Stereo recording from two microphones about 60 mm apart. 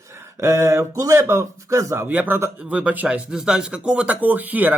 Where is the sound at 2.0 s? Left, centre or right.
Right.